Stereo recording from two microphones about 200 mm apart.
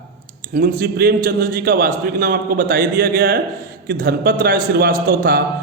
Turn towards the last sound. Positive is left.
turn(degrees=-45)  # may be behind; listen again after turning